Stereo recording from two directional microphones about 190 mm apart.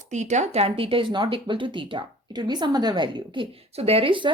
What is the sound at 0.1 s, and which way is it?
Speech, 40° right (ahead or behind).